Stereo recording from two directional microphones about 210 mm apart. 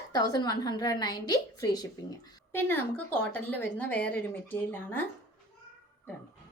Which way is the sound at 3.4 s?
10° left (ahead or behind).